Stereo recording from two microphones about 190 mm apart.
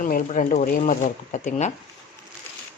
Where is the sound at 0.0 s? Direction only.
45° left (ahead or behind).